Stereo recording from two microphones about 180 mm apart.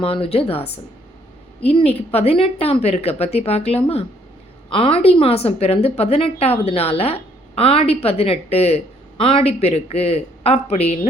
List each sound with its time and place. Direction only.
0.0 s a woman's voice: 30° left (ahead or behind)